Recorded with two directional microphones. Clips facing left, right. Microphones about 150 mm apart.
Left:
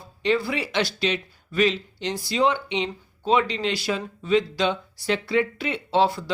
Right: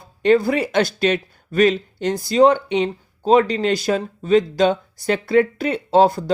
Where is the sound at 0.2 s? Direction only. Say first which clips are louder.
Right 8 dB; 50° right (ahead or behind).